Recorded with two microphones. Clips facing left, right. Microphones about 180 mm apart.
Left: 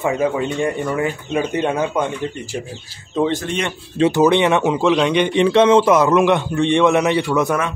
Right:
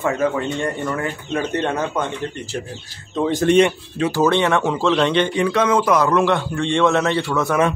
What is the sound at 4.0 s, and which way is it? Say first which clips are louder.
A man's voice: left 3 dB; 20° left (ahead or behind).